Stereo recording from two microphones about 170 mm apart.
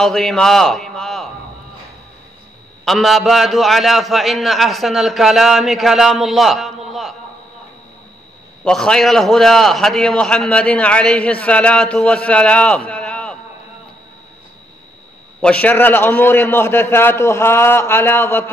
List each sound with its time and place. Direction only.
0.0 s a man's voice: centre (ahead or behind)
2.8 s a man's voice: centre (ahead or behind)
8.6 s a man's voice: 5° left (ahead or behind)
15.4 s a man's voice: 10° left (ahead or behind)